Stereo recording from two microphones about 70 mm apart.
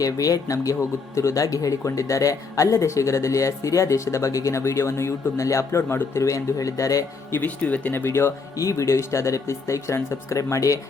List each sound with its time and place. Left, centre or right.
0.0 s speech: left
7.3 s speech: left
8.5 s speech: left